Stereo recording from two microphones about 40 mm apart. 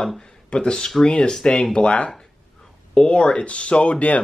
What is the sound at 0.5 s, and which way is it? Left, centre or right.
Speech, left.